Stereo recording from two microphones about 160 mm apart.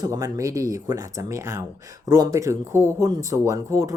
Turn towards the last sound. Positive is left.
turn(degrees=-20)  # may be behind; listen again after turning